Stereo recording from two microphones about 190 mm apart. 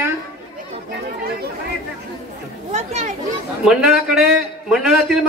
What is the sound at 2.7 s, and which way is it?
Speech, 35° right (ahead or behind).